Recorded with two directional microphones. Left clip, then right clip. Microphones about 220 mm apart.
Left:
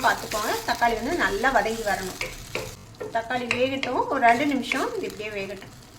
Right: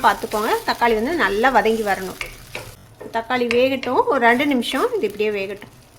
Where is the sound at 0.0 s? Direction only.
45° right (ahead or behind).